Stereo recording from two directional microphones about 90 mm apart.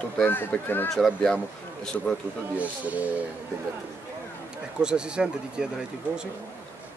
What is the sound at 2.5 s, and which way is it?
Speech, 15° right (ahead or behind).